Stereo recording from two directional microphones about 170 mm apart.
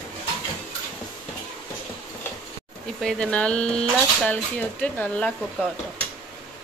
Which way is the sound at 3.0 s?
5° left (ahead or behind).